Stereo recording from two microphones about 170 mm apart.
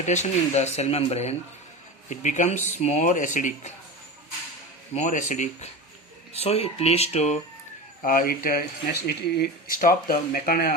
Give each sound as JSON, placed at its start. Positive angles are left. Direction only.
{"t": 0.0, "sound": "speech", "side_deg": 40}
{"t": 4.9, "sound": "speech", "side_deg": 45}
{"t": 8.0, "sound": "speech", "side_deg": 55}